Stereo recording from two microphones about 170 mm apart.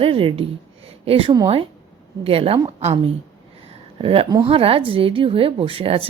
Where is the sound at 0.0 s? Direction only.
30° right (ahead or behind).